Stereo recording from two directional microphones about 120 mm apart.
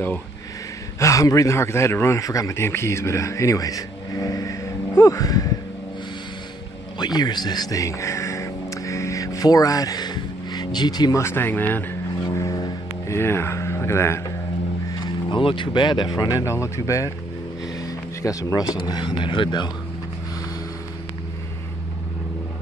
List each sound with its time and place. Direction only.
0.9 s a man's voice: 25° left (ahead or behind)
7.0 s speech: 35° left (ahead or behind); by 11.8 s 15° left (ahead or behind)
13.0 s speech: 20° left (ahead or behind)
15.3 s a man's voice: 45° left (ahead or behind)